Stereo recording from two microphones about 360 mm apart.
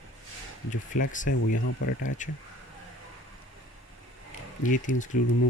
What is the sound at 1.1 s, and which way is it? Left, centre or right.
Speech, left.